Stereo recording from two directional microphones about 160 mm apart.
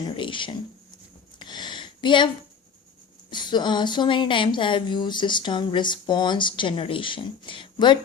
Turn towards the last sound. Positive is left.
turn(degrees=30)  # may be behind; listen again after turning